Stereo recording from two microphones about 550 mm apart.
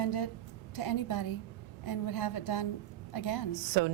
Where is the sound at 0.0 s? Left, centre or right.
Left.